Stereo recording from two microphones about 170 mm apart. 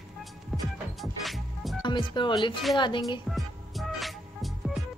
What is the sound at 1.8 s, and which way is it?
Speech, 25° left (ahead or behind).